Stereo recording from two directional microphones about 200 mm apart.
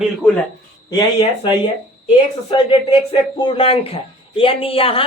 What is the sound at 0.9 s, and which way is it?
Speech, 25° left (ahead or behind).